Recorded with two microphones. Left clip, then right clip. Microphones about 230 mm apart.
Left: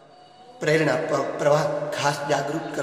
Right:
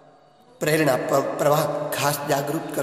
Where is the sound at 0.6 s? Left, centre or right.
Right.